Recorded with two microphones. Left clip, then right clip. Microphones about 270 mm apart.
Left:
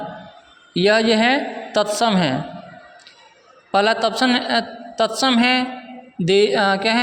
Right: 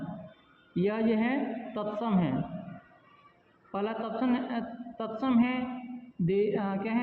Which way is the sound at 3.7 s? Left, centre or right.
Left.